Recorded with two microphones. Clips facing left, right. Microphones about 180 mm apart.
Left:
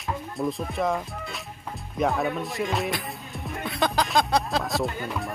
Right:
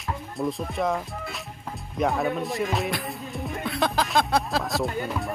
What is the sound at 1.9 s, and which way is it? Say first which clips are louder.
Music: even; centre (ahead or behind).